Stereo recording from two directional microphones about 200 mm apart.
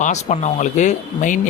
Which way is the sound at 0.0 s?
35° left (ahead or behind).